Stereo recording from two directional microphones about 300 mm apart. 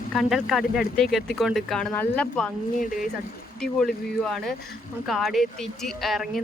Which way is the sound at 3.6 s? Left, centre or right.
Centre.